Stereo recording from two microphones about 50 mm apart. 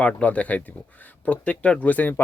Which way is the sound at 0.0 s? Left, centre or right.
Left.